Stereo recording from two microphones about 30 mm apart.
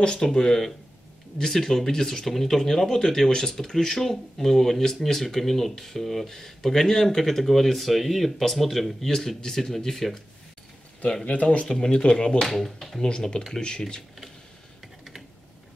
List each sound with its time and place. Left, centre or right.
0.2 s speech: centre
2.2 s speech: centre
7.2 s speech: centre
11.7 s speech: left
12.4 s speech: centre
13.0 s speech: left